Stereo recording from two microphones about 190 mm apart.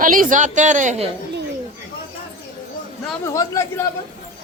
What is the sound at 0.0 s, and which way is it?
A woman's voice, 45° right (ahead or behind).